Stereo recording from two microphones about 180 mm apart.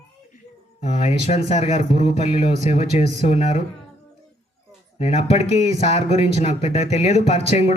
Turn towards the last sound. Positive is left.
turn(degrees=35)  # may be behind; listen again after turning